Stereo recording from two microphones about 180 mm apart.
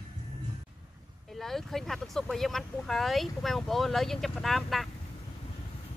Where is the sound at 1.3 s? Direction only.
Centre (ahead or behind).